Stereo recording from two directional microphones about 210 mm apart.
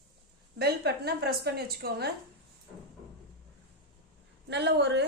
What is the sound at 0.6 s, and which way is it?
A woman's voice, 50° right (ahead or behind).